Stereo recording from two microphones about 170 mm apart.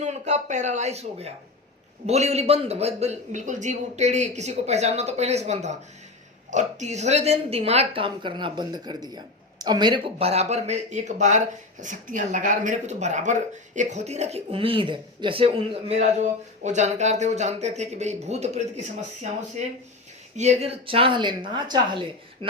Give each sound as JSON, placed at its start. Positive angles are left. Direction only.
{"t": 0.0, "sound": "speech", "side_deg": -45}
{"t": 20.3, "sound": "speech", "side_deg": -40}